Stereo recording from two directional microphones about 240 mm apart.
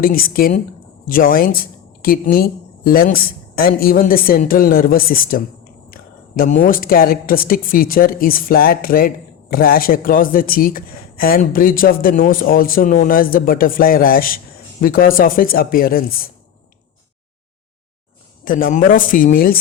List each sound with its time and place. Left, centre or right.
0.0 s speech: left
18.4 s speech: left